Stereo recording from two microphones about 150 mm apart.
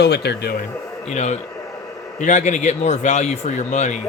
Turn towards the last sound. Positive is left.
turn(degrees=55)  # may be behind; listen again after turning